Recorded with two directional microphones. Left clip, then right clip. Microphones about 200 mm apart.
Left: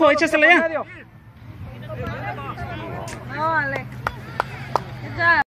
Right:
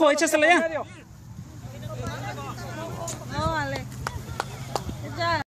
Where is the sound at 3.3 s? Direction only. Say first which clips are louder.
Left 7 dB; 50° right (ahead or behind).